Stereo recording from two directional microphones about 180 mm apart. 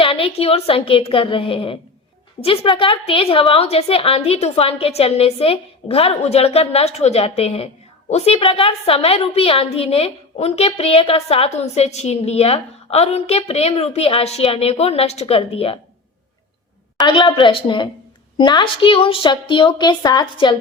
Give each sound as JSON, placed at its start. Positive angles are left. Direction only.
{"t": 0.0, "sound": "a woman's voice", "side_deg": 30}
{"t": 17.1, "sound": "a woman's voice", "side_deg": 25}